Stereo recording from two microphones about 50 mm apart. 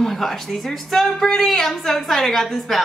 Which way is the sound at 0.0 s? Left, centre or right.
Centre.